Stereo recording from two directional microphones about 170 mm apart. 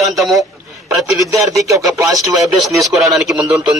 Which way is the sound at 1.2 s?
20° right (ahead or behind).